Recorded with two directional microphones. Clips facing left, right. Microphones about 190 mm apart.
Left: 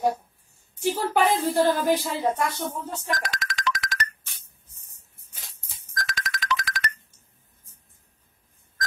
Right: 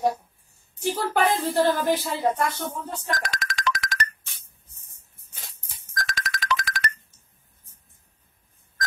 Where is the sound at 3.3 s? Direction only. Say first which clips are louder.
Right 1 dB; 50° right (ahead or behind).